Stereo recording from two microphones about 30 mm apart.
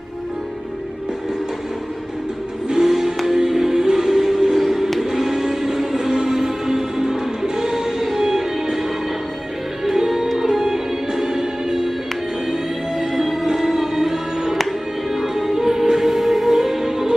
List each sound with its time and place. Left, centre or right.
2.8 s music: centre
9.8 s music: centre
14.6 s music: centre
15.2 s music: centre